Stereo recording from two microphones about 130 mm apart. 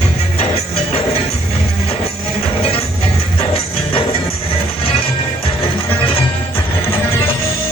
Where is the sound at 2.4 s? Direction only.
50° left (ahead or behind).